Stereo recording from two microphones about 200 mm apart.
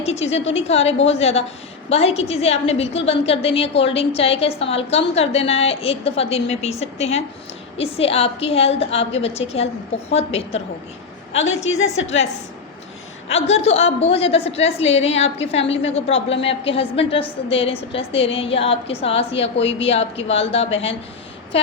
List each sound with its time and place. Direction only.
0.0 s a woman's voice: 30° left (ahead or behind)
13.2 s a woman's voice: 30° left (ahead or behind)